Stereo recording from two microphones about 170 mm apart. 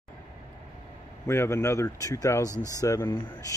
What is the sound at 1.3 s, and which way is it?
Speech, 15° left (ahead or behind).